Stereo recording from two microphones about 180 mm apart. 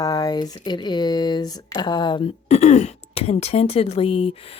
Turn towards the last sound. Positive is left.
turn(degrees=30)  # may be behind; listen again after turning